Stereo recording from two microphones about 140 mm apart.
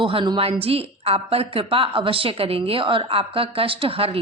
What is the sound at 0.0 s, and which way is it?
A woman's voice, 35° right (ahead or behind).